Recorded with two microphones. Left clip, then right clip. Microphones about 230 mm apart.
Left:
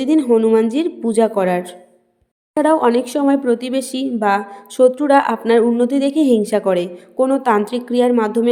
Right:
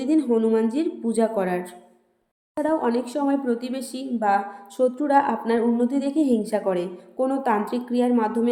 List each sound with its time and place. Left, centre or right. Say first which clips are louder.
0.0 s a woman's voice: left 7 dB; left